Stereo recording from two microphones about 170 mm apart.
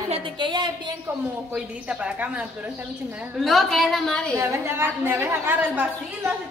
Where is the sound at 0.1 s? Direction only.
30° right (ahead or behind).